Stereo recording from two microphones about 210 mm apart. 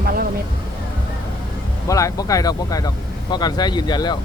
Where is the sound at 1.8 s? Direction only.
15° left (ahead or behind).